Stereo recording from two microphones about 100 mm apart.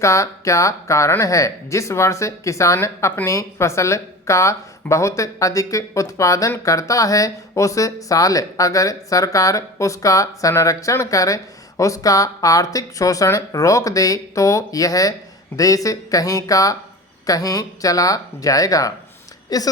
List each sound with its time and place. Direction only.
0.0 s speech: 30° left (ahead or behind)